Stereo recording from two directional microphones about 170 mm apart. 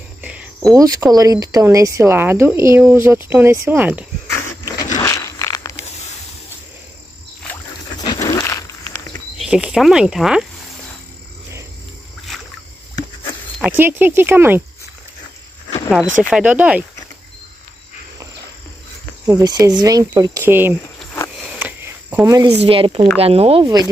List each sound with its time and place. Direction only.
0.2 s cricket: 10° right (ahead or behind)
0.7 s speech: 20° right (ahead or behind)
4.9 s a sound: 20° left (ahead or behind)
8.0 s a sound: 20° left (ahead or behind)
9.4 s speech: 5° right (ahead or behind)
12.3 s rowboat: centre (ahead or behind)
13.6 s speech: 10° right (ahead or behind)
16.2 s speech: 5° right (ahead or behind)
19.2 s speech: 20° right (ahead or behind)
21.5 s walk: 10° right (ahead or behind)
22.2 s speech: 20° right (ahead or behind)
22.6 s speech: 30° right (ahead or behind)
23.6 s speech: 25° right (ahead or behind)